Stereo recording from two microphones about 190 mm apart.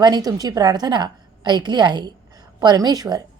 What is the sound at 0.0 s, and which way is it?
A woman's voice, 20° right (ahead or behind).